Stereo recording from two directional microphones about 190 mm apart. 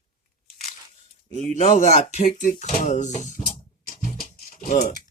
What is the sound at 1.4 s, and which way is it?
Speech, 40° left (ahead or behind).